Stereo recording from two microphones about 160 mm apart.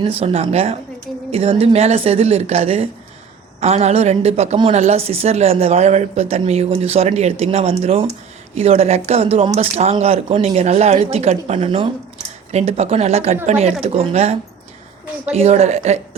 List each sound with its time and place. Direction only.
0.0 s a woman's voice: 35° right (ahead or behind)